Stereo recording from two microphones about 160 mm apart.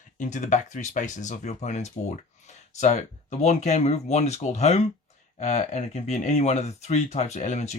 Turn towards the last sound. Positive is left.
turn(degrees=45)  # may be behind; listen again after turning